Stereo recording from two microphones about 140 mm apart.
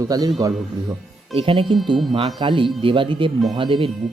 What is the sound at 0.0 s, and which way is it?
Speech, 25° right (ahead or behind).